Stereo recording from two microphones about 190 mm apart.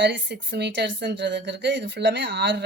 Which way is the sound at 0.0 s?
70° right (ahead or behind).